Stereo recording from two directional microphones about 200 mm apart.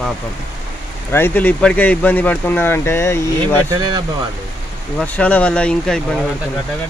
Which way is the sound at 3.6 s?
20° right (ahead or behind).